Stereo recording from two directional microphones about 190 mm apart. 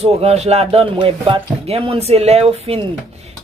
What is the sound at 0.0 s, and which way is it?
Speech, 35° right (ahead or behind).